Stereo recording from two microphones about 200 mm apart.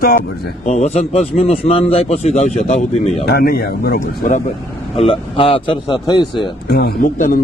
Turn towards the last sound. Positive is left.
turn(degrees=40)  # may be behind; listen again after turning